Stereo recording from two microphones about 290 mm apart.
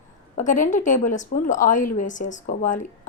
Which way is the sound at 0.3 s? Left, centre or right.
Left.